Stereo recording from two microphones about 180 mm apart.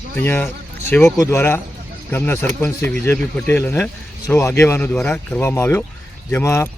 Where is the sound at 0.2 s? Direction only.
10° left (ahead or behind).